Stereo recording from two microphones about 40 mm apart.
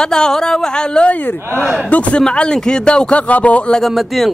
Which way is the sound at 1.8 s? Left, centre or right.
Left.